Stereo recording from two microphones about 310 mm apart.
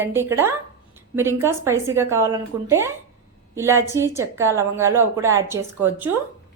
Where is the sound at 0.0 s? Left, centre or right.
Centre.